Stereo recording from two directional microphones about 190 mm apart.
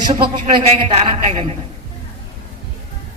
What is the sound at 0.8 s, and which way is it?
Speech, 35° right (ahead or behind).